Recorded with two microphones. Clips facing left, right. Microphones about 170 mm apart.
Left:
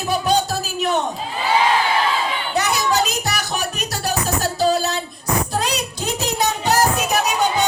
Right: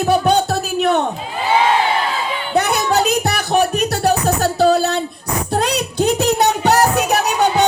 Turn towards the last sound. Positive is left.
turn(degrees=-65)  # may be behind; listen again after turning